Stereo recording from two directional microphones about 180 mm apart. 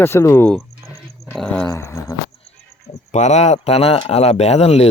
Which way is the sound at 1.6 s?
15° left (ahead or behind).